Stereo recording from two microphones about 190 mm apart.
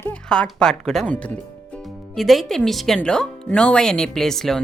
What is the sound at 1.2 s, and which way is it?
Music, 5° left (ahead or behind).